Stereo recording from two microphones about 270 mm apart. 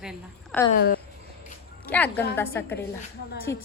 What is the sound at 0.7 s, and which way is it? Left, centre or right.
Speech, left.